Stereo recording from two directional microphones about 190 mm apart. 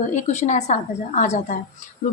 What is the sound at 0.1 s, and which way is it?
A woman's voice, 35° left (ahead or behind).